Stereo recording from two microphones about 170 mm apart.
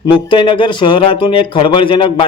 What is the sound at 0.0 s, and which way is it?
Speech, 30° left (ahead or behind).